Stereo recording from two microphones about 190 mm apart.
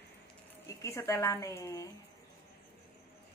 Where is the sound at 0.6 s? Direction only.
15° left (ahead or behind).